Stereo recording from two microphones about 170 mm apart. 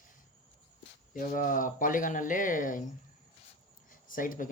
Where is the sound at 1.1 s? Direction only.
55° left (ahead or behind).